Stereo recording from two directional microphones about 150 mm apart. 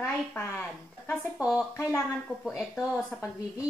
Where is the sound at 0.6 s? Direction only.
Centre (ahead or behind).